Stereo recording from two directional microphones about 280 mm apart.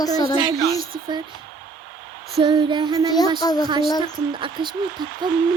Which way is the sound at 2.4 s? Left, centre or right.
Centre.